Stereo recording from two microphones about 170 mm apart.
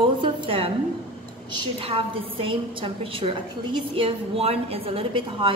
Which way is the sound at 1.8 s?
35° right (ahead or behind).